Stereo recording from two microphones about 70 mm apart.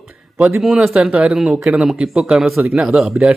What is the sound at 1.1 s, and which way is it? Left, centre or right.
Speech, centre.